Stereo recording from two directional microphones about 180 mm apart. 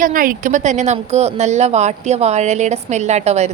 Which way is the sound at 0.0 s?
50° right (ahead or behind).